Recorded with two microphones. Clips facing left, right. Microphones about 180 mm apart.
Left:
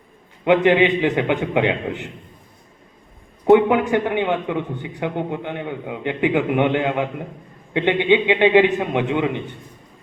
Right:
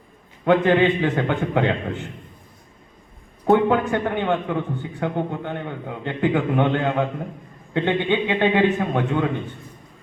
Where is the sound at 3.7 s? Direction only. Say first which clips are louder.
Left 2 dB; 15° left (ahead or behind).